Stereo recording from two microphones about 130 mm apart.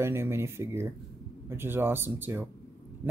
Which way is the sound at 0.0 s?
20° right (ahead or behind).